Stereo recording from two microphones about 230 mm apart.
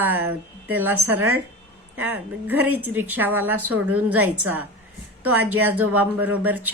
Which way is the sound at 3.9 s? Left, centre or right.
Right.